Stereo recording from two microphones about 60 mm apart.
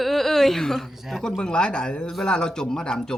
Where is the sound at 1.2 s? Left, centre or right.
Centre.